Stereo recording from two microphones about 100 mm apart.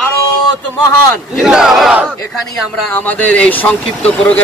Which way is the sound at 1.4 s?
5° right (ahead or behind).